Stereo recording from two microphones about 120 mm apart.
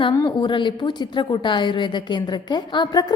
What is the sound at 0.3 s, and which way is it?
Speech, 45° left (ahead or behind).